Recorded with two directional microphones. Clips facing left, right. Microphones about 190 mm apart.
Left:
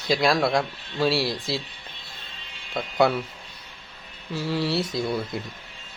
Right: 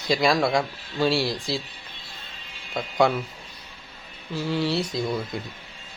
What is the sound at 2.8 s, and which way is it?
Speech, centre (ahead or behind).